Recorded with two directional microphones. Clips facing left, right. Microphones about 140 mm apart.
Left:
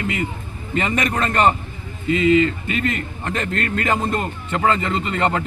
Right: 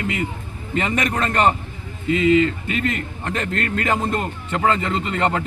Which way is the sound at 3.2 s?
10° right (ahead or behind).